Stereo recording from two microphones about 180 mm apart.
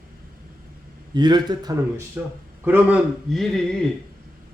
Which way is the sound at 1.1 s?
25° right (ahead or behind).